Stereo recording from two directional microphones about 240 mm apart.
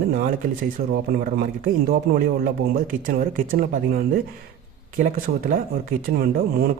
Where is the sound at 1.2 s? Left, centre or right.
Right.